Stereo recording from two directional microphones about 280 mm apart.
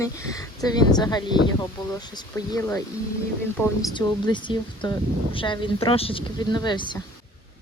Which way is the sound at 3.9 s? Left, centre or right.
Centre.